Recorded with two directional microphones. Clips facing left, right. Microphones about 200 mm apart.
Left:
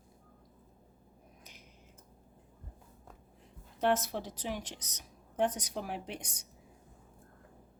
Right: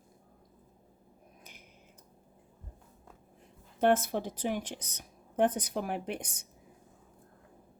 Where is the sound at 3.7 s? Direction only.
55° right (ahead or behind).